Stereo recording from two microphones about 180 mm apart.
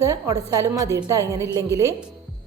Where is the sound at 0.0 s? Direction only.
15° right (ahead or behind).